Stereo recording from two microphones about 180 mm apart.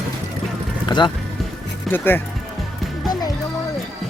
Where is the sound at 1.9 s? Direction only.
10° left (ahead or behind).